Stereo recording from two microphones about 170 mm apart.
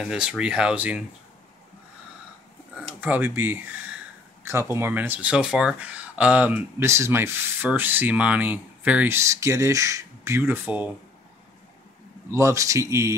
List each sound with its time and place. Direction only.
0.0 s speech: 5° right (ahead or behind)
3.0 s speech: 10° right (ahead or behind)
12.3 s speech: 15° right (ahead or behind)